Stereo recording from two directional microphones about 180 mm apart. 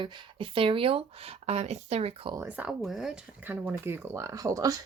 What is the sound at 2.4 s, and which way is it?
Speech, 10° right (ahead or behind).